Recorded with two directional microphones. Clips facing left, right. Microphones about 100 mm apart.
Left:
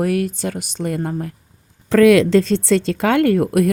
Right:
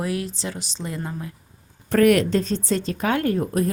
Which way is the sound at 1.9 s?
90° left.